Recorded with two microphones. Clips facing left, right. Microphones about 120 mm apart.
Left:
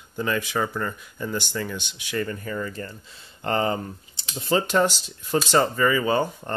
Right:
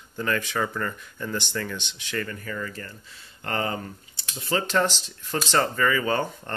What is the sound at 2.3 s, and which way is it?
Speech, 25° left (ahead or behind).